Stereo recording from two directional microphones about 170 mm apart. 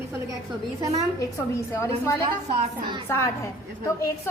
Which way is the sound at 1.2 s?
20° left (ahead or behind).